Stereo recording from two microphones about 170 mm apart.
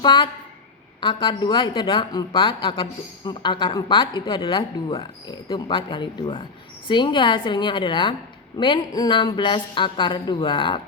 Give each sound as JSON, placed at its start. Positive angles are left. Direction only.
{"t": 0.0, "sound": "a woman's voice", "side_deg": 25}